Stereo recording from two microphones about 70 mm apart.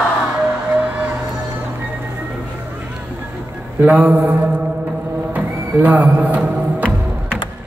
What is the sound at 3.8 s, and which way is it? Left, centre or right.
Speech, centre.